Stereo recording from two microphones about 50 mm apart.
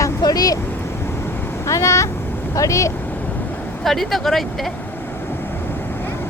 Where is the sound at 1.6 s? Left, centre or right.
Left.